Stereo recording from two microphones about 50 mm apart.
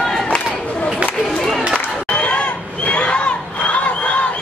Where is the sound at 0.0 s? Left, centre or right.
Centre.